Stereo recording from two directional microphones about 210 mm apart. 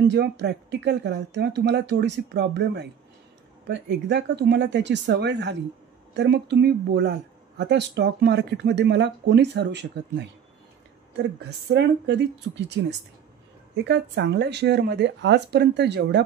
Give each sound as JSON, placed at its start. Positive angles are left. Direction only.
{"t": 0.1, "sound": "speech", "side_deg": -55}
{"t": 11.7, "sound": "speech", "side_deg": -55}
{"t": 13.8, "sound": "speech", "side_deg": -55}